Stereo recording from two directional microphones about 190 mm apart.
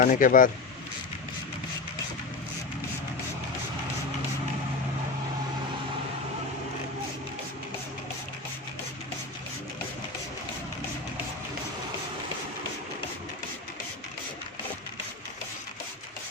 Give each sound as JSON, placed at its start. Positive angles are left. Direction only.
{"t": 0.0, "sound": "speech", "side_deg": 45}